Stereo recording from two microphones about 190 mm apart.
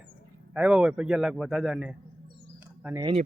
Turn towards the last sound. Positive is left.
turn(degrees=-20)  # may be behind; listen again after turning